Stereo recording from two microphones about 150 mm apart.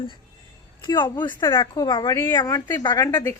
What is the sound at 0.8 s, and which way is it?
A woman's voice, 30° left (ahead or behind).